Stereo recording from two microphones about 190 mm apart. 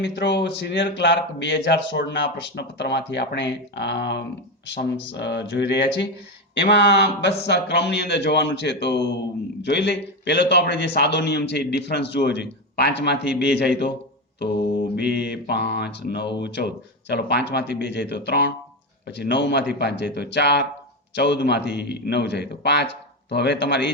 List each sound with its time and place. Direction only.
0.0 s a man's voice: 65° left (ahead or behind)
15.2 s a man's voice: 60° left (ahead or behind)